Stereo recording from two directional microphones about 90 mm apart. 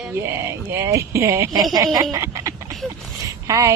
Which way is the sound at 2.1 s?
35° right (ahead or behind).